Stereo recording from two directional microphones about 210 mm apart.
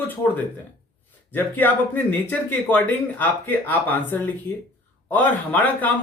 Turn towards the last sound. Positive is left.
turn(degrees=10)  # may be behind; listen again after turning